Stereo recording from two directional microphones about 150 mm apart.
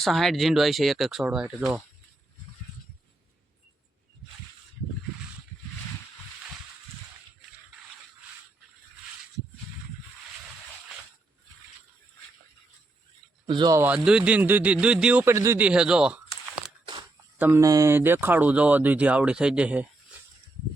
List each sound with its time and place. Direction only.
0.0 s speech: centre (ahead or behind)
13.5 s speech: 30° right (ahead or behind)
13.7 s speech: 10° right (ahead or behind)
16.8 s a sound: 30° right (ahead or behind)
17.3 s speech: 15° right (ahead or behind)